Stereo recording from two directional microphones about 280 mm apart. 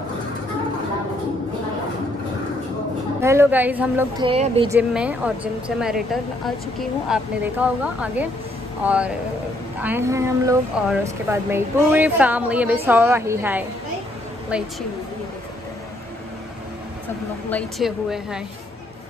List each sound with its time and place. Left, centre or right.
3.2 s speech: centre
4.3 s speech: centre
4.7 s a woman's voice: centre
17.5 s a woman's voice: centre